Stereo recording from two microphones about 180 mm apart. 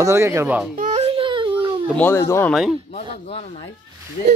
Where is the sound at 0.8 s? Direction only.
40° right (ahead or behind).